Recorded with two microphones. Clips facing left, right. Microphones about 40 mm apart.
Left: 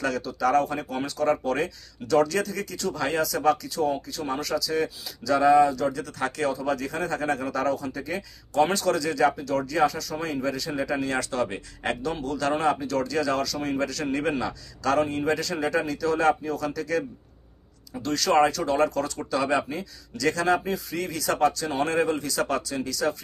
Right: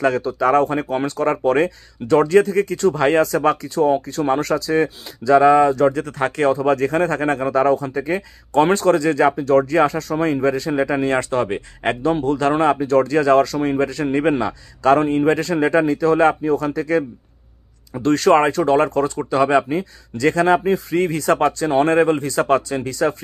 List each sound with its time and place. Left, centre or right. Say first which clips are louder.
0.0 s speech: right 8 dB; right